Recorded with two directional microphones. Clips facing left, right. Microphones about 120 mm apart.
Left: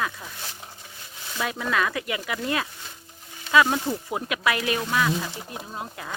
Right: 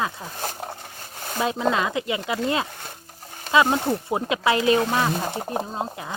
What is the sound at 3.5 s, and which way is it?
Speech, 50° right (ahead or behind).